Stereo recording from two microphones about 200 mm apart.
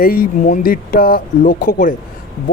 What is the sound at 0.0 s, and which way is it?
A man's voice, 45° left (ahead or behind).